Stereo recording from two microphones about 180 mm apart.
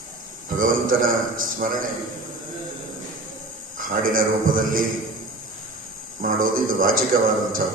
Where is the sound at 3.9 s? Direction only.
50° right (ahead or behind).